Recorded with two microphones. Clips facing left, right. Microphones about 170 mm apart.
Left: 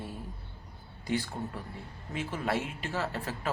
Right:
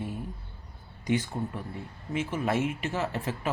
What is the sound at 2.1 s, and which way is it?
Speech, 20° right (ahead or behind).